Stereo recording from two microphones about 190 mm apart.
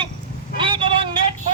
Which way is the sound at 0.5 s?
25° right (ahead or behind).